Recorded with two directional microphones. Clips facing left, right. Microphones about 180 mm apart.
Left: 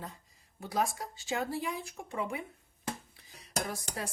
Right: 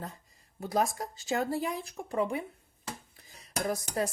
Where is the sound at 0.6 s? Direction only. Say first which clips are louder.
Right 3 dB; 40° right (ahead or behind).